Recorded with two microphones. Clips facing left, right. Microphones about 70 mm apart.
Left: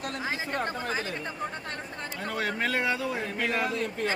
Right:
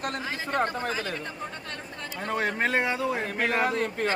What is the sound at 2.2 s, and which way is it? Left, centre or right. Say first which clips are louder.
Speech: right 3 dB; right.